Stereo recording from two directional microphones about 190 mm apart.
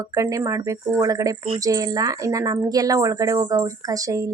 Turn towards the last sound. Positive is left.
turn(degrees=-20)  # may be behind; listen again after turning